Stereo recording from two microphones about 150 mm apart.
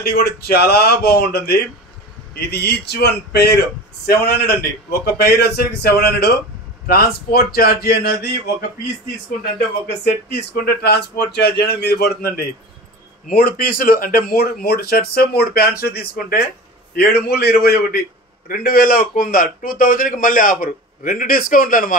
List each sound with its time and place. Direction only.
0.0 s speech: 90° left
10.6 s speech: 90° left
18.5 s a man's voice: 75° left (ahead or behind)